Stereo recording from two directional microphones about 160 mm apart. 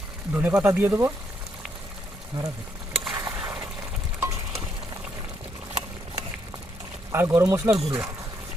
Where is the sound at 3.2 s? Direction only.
20° right (ahead or behind).